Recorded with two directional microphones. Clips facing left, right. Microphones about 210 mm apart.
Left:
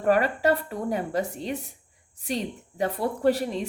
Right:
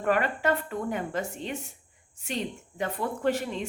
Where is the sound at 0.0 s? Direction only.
40° left (ahead or behind).